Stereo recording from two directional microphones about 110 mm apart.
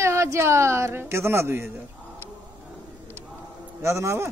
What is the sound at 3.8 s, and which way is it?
Speech, 25° right (ahead or behind).